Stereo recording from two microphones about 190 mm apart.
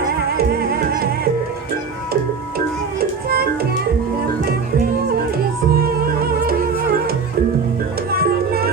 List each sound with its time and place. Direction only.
3.0 s music: 55° right (ahead or behind)
6.1 s music: 50° right (ahead or behind)